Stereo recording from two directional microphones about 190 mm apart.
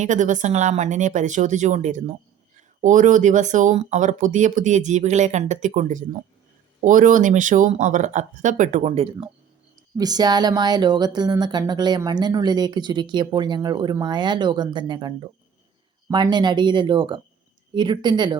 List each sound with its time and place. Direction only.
0.0 s speech: 40° right (ahead or behind)
10.0 s speech: 20° right (ahead or behind)